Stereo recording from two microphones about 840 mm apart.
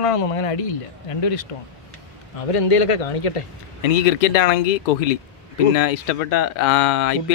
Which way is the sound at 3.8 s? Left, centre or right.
Left.